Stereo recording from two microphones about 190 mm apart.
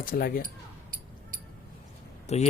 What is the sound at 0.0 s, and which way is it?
Speech, 50° left (ahead or behind).